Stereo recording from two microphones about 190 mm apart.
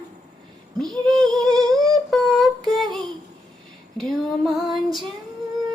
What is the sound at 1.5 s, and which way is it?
Humming, 20° right (ahead or behind).